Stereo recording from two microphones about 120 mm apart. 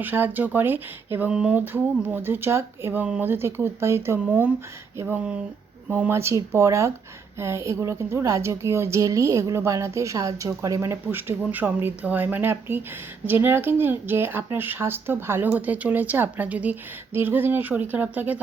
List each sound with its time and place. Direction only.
0.0 s speech: 15° right (ahead or behind)
1.3 s speech: 5° right (ahead or behind)
1.5 s a woman's voice: 15° right (ahead or behind)